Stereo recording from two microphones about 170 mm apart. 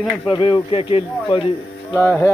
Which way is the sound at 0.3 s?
30° left (ahead or behind).